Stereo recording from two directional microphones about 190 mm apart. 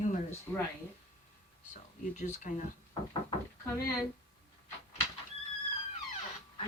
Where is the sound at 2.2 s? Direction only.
40° left (ahead or behind).